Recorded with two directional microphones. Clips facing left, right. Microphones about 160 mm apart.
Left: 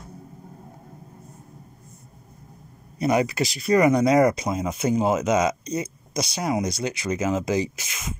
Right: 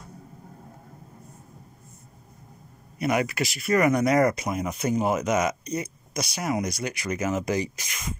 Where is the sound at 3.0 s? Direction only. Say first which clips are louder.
Left 3 dB; 20° left (ahead or behind).